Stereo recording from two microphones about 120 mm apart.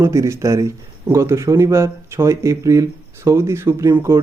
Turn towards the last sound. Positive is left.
turn(degrees=-20)  # may be behind; listen again after turning